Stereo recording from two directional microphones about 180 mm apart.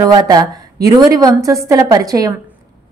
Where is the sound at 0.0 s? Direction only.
20° right (ahead or behind).